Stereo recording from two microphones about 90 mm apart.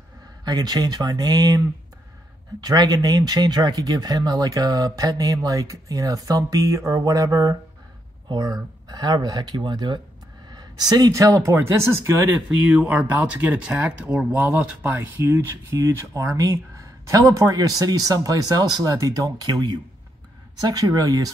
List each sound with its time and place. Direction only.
0.5 s speech: 45° right (ahead or behind)
2.6 s speech: 45° right (ahead or behind)
12.6 s speech: 15° right (ahead or behind); by 21.3 s 40° right (ahead or behind)